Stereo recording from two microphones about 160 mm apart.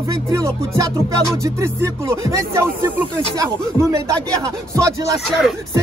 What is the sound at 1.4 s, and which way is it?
A man's voice, 15° right (ahead or behind).